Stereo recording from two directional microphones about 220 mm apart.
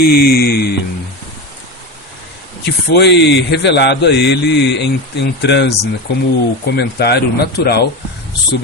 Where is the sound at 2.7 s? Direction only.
50° left (ahead or behind).